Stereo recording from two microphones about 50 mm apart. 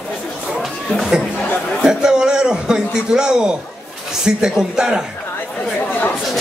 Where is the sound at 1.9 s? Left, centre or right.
Centre.